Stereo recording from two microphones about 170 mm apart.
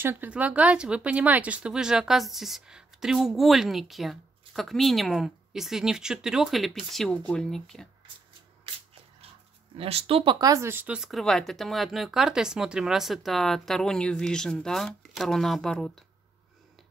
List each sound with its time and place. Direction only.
0.0 s speech: 10° right (ahead or behind); by 7.9 s 5° left (ahead or behind)
9.8 s speech: 35° right (ahead or behind)
10.4 s speech: 15° right (ahead or behind); by 15.9 s centre (ahead or behind)